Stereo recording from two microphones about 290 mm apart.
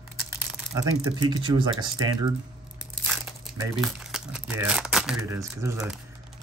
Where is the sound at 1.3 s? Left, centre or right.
Centre.